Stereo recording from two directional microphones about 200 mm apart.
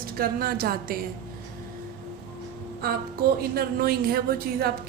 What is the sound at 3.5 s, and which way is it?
A woman's voice, 50° right (ahead or behind).